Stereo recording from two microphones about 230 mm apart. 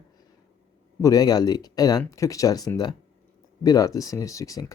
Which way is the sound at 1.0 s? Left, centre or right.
Centre.